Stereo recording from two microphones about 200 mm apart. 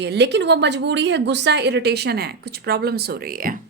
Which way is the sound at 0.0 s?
60° right (ahead or behind).